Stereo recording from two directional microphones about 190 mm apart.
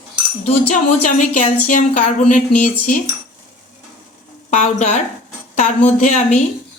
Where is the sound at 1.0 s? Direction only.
40° left (ahead or behind).